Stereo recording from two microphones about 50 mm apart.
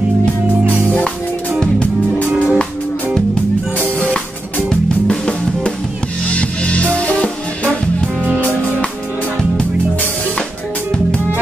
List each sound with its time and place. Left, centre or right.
2.3 s music: right
4.6 s music: centre